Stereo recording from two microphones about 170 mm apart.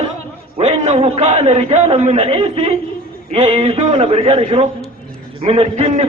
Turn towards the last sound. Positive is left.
turn(degrees=-35)  # may be behind; listen again after turning